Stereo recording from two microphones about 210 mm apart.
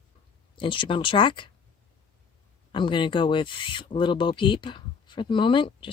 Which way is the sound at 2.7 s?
20° left (ahead or behind).